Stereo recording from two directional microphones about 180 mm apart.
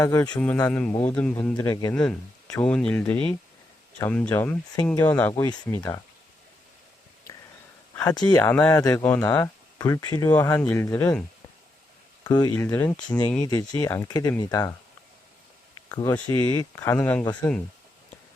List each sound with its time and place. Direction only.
0.0 s speech: 15° left (ahead or behind)
2.0 s speech: 5° left (ahead or behind)
8.0 s speech: 20° left (ahead or behind)
13.4 s speech: 20° left (ahead or behind)
15.9 s speech: 20° left (ahead or behind)